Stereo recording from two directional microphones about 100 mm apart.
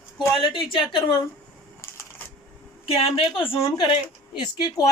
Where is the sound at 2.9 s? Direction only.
70° left (ahead or behind); by 4.0 s 50° left (ahead or behind).